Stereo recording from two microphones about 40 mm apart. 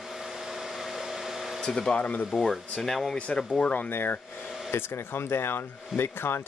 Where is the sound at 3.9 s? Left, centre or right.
Left.